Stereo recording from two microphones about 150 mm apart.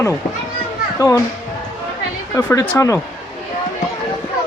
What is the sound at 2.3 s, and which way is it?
Speech, 15° left (ahead or behind).